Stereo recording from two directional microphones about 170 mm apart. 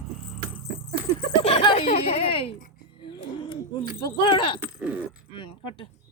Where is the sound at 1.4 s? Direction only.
35° left (ahead or behind).